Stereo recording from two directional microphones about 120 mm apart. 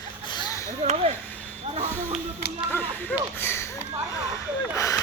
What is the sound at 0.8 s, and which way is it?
Speech, 60° right (ahead or behind).